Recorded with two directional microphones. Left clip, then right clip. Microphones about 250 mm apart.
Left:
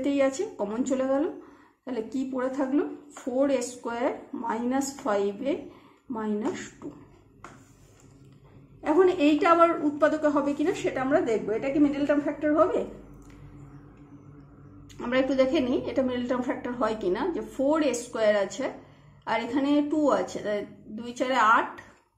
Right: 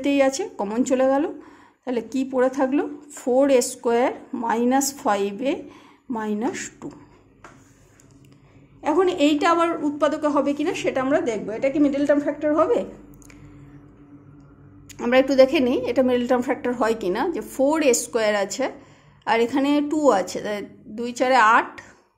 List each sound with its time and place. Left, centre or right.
0.0 s a woman's voice: right
8.8 s a woman's voice: right
14.9 s a woman's voice: right